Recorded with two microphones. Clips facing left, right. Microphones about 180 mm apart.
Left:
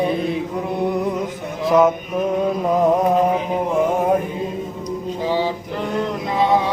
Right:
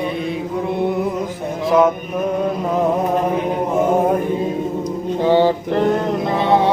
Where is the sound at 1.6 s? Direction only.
Centre (ahead or behind).